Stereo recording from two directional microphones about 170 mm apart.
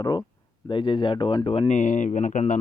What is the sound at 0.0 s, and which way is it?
Speech, 25° left (ahead or behind).